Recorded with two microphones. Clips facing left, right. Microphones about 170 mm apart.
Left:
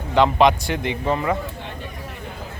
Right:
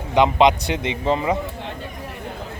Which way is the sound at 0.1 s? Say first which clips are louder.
Even; 15° right (ahead or behind).